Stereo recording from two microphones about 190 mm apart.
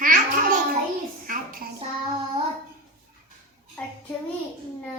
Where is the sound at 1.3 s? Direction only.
50° right (ahead or behind).